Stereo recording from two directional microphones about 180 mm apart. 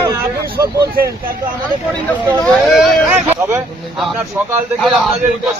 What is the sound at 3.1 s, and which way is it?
Speech, 15° right (ahead or behind).